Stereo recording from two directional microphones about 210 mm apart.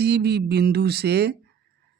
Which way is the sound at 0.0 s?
50° right (ahead or behind).